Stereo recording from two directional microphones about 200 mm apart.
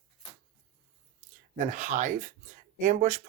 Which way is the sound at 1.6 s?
40° right (ahead or behind).